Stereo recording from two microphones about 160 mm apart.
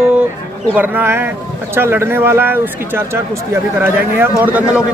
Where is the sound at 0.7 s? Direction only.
10° right (ahead or behind).